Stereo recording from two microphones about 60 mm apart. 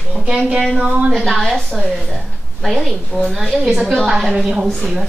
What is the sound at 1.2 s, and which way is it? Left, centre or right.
A woman's voice, centre.